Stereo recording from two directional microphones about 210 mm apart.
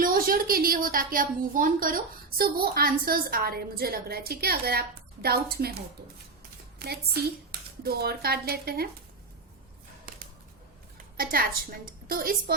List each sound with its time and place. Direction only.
0.0 s a woman's voice: 45° right (ahead or behind)
11.2 s a woman's voice: 45° right (ahead or behind)